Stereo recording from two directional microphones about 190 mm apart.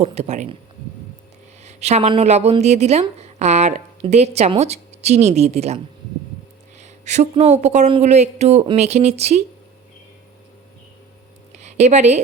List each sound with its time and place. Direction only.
0.0 s a woman's voice: 35° right (ahead or behind)
1.6 s a woman's voice: 35° right (ahead or behind)
11.6 s speech: 35° right (ahead or behind)